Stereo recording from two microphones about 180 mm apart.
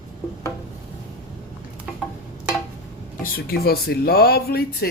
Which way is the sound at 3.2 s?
55° left (ahead or behind).